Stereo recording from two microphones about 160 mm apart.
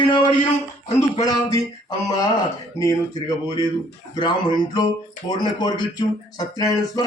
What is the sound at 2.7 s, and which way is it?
Speech, 20° left (ahead or behind).